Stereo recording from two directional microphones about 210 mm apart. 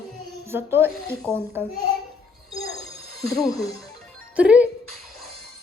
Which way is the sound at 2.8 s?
Centre (ahead or behind).